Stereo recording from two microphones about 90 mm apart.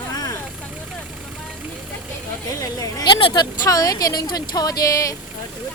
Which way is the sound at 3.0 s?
65° left (ahead or behind).